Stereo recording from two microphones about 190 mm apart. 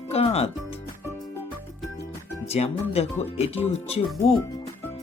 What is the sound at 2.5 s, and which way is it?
Speech, 35° left (ahead or behind).